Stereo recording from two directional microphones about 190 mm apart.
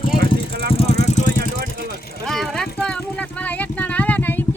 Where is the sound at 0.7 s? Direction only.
30° left (ahead or behind).